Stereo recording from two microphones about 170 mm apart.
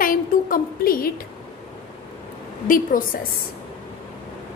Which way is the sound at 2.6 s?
55° left (ahead or behind).